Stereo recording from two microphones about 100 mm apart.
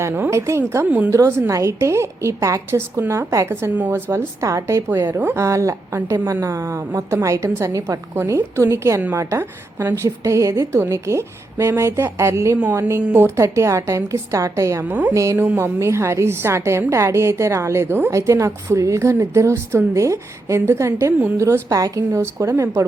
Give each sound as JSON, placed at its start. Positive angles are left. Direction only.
{"t": 0.0, "sound": "a woman's voice", "side_deg": -25}
{"t": 0.9, "sound": "speech", "side_deg": -15}
{"t": 1.1, "sound": "a woman's voice", "side_deg": -30}